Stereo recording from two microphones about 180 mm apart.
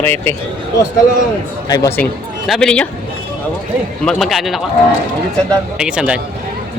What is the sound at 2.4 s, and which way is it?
Speech, centre (ahead or behind).